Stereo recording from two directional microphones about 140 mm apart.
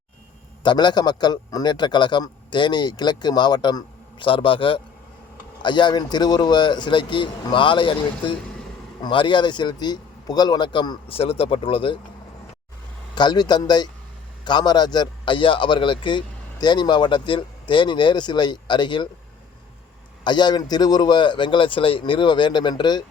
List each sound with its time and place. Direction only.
0.6 s a man's voice: 35° left (ahead or behind)
13.1 s a man's voice: 30° left (ahead or behind)
20.2 s a man's voice: 30° left (ahead or behind)